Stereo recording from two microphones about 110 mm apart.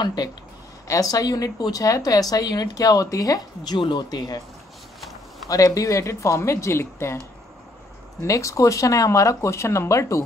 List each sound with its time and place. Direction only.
0.0 s speech: 35° left (ahead or behind)
5.5 s speech: 30° left (ahead or behind)
8.2 s speech: 30° left (ahead or behind)